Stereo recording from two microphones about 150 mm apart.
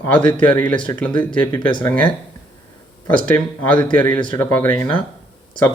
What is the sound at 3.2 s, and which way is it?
Speech, 10° left (ahead or behind).